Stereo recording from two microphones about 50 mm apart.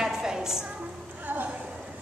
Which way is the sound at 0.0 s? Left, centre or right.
Centre.